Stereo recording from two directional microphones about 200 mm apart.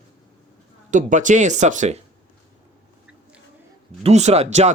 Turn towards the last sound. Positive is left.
turn(degrees=-35)  # may be behind; listen again after turning